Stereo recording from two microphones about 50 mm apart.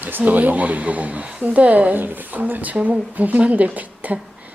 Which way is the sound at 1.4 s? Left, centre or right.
Right.